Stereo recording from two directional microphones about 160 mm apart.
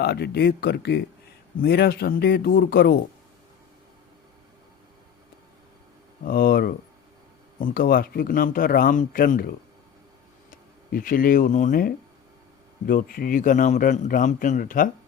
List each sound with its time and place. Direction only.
0.0 s speech: 90° left
6.2 s a man's voice: 70° left (ahead or behind)
10.9 s a man's voice: 60° left (ahead or behind)
12.9 s a man's voice: 60° left (ahead or behind)